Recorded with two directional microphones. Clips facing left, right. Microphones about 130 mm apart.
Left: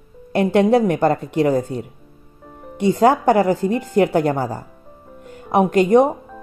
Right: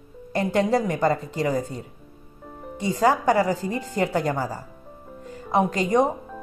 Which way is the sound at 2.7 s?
60° left (ahead or behind).